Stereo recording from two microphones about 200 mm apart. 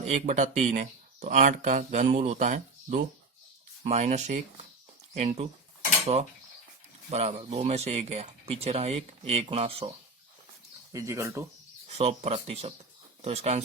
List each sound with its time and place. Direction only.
0.1 s speech: 35° right (ahead or behind)
7.1 s speech: 30° right (ahead or behind)
10.9 s speech: 15° right (ahead or behind)
11.9 s speech: 35° right (ahead or behind)